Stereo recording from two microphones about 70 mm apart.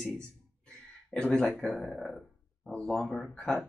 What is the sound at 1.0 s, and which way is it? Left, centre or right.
Speech, centre.